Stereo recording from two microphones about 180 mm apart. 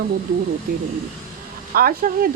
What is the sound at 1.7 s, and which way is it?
Speech, 55° right (ahead or behind).